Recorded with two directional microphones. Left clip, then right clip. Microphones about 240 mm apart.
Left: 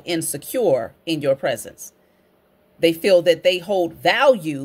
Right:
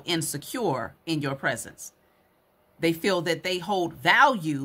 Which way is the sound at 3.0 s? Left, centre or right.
Centre.